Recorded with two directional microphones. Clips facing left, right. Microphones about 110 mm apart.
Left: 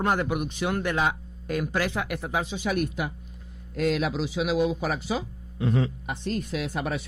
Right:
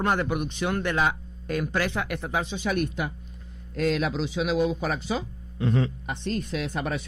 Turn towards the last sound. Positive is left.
turn(degrees=10)  # may be behind; listen again after turning